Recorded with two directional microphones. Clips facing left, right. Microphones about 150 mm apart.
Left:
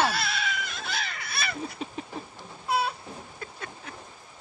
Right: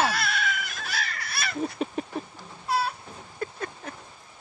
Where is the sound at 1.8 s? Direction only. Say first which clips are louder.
Right 6 dB; 55° right (ahead or behind).